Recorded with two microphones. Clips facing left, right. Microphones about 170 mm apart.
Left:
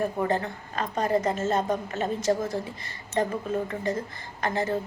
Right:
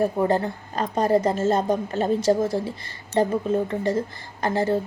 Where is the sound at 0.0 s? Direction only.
35° right (ahead or behind).